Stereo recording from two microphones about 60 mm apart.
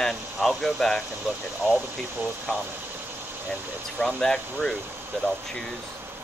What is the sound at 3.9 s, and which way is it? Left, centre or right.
Speech, centre.